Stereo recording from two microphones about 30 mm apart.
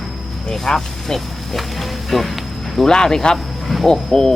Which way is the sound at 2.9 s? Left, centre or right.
Centre.